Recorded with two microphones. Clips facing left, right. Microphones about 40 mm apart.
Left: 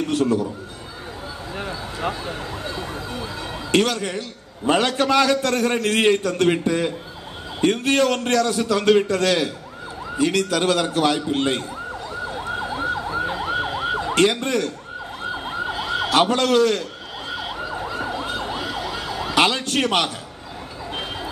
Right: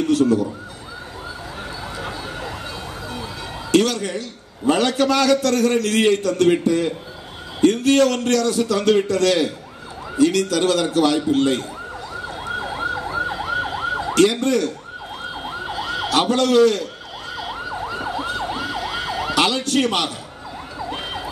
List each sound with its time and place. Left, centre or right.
0.1 s a man's voice: left
3.7 s a man's voice: left
12.8 s emergency vehicle: centre
14.0 s emergency vehicle: left
15.4 s emergency vehicle: centre
16.1 s a man's voice: left
17.4 s emergency vehicle: centre
18.2 s emergency vehicle: centre
18.5 s emergency vehicle: centre
18.8 s emergency vehicle: right
19.3 s emergency vehicle: left